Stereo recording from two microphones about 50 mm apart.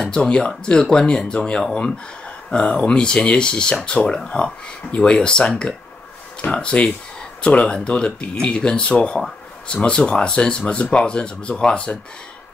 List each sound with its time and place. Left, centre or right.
0.0 s speech: centre
6.5 s speech: left